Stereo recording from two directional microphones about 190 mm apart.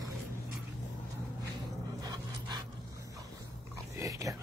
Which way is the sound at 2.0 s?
20° right (ahead or behind).